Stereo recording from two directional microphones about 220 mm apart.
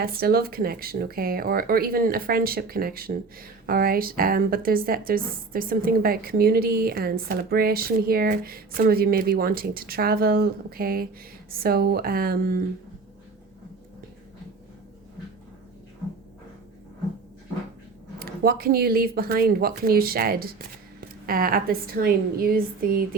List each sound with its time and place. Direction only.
0.0 s speech: 45° right (ahead or behind)
18.2 s a woman's voice: 45° right (ahead or behind)